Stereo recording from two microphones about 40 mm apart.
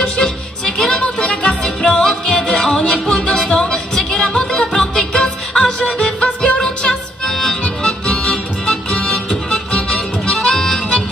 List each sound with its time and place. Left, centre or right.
0.0 s music: left
1.0 s music: left
1.4 s music: centre
7.2 s harmonica: centre
7.6 s music: left
9.8 s harmonica: centre